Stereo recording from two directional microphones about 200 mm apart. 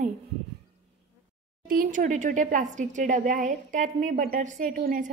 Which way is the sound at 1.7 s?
45° right (ahead or behind).